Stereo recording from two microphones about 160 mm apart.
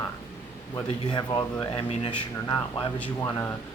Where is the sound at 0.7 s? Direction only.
25° left (ahead or behind).